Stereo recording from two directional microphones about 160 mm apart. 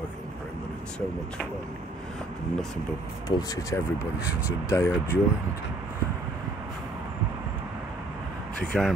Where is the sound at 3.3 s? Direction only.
25° left (ahead or behind).